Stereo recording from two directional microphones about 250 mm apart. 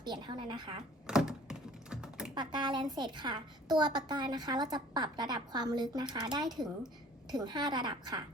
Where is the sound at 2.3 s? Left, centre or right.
Centre.